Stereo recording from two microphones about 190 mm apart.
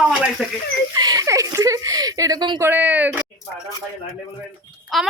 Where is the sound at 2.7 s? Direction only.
10° right (ahead or behind).